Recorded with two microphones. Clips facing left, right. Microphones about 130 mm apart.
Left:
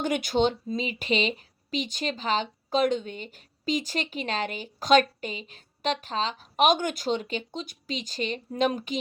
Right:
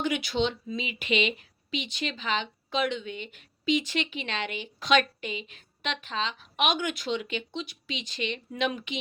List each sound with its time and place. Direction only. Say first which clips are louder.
0.0 s speech: left 3 dB; 45° left (ahead or behind)